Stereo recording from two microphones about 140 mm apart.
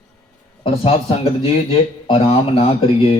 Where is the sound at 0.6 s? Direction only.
40° left (ahead or behind).